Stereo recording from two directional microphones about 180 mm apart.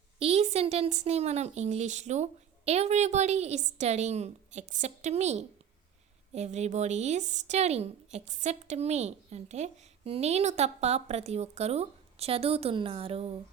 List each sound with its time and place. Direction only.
0.2 s a woman's voice: 35° right (ahead or behind)